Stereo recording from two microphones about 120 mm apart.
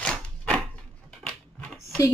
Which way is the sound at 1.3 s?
10° left (ahead or behind).